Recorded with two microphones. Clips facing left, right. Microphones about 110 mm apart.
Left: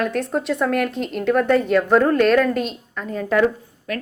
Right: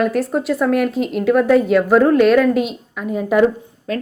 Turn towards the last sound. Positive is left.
turn(degrees=-25)  # may be behind; listen again after turning